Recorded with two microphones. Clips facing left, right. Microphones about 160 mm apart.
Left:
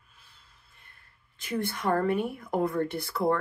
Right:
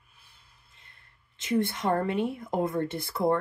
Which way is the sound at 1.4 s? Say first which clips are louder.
Right 4 dB; 20° right (ahead or behind).